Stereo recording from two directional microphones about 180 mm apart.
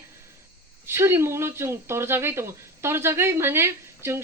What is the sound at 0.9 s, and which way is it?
Speech, 15° right (ahead or behind).